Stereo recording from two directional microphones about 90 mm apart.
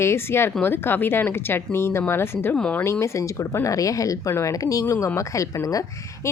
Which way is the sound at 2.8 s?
30° left (ahead or behind).